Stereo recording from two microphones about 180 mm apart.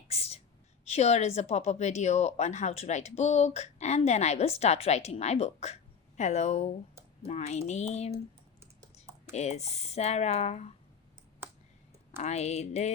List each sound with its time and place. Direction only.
0.1 s whispering: 35° left (ahead or behind)
0.9 s a woman's voice: 35° left (ahead or behind)
8.6 s computer keyboard: 20° right (ahead or behind)
9.3 s a woman's voice: 40° left (ahead or behind)
12.1 s a woman's voice: 40° left (ahead or behind)